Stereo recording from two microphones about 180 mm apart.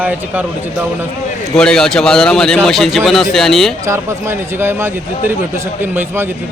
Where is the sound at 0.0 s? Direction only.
10° right (ahead or behind).